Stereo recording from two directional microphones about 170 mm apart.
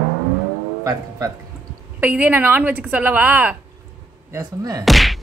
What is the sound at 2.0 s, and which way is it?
Speech, 10° right (ahead or behind).